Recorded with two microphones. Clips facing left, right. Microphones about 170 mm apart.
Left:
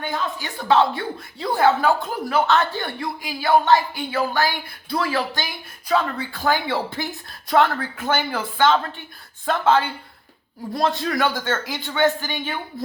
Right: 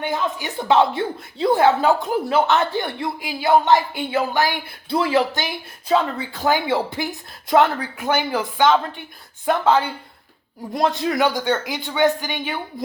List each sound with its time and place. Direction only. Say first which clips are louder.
0.1 s a man's voice: right 3 dB; 20° right (ahead or behind)